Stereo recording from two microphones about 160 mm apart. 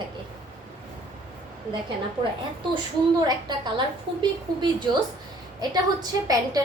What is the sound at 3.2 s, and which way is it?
A woman's voice, 30° right (ahead or behind).